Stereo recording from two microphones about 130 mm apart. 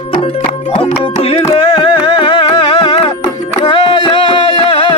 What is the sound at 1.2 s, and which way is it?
Carnatic music, 45° left (ahead or behind).